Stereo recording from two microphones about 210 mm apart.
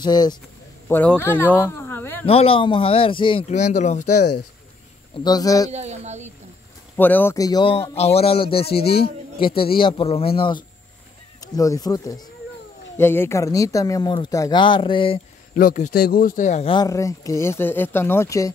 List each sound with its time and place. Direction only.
0.0 s speech: 20° left (ahead or behind)
0.8 s speech: 10° left (ahead or behind)
1.2 s a sound: 10° left (ahead or behind)
2.2 s speech: 25° left (ahead or behind)
5.2 s speech: 20° left (ahead or behind)
5.7 s speech: 30° right (ahead or behind)
7.0 s speech: 10° left (ahead or behind)
15.5 s speech: 40° left (ahead or behind); by 18.5 s 15° left (ahead or behind)